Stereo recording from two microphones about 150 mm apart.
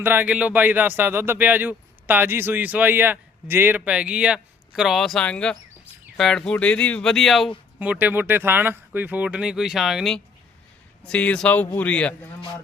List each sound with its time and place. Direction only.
0.0 s speech: 15° right (ahead or behind)
7.8 s a man's voice: 10° right (ahead or behind); by 12.3 s 10° left (ahead or behind)